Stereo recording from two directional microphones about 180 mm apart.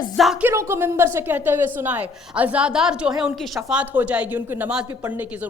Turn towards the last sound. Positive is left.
turn(degrees=-10)  # may be behind; listen again after turning